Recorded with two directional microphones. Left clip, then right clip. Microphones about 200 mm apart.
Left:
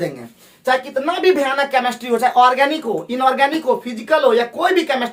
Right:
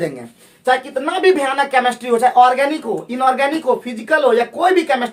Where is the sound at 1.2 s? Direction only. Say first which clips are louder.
Right 2 dB; 15° right (ahead or behind).